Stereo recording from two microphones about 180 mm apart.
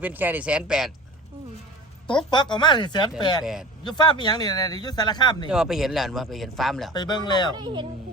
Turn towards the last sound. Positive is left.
turn(degrees=-25)  # may be behind; listen again after turning